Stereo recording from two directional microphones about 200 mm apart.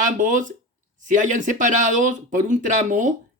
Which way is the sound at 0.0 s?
40° right (ahead or behind).